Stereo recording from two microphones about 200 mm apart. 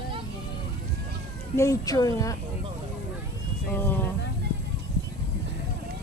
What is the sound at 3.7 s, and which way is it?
Speech, 10° left (ahead or behind).